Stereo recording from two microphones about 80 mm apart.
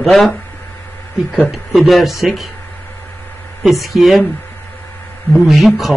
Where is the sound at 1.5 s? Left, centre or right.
Centre.